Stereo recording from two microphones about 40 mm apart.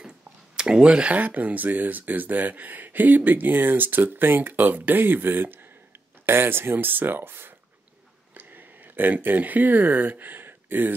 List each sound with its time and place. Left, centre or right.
0.6 s speech: centre
1.1 s speech: right
6.2 s speech: right
8.4 s a sound: right
9.2 s speech: right